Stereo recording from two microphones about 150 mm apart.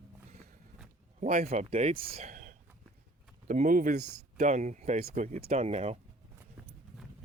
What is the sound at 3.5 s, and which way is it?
Speech, 65° right (ahead or behind).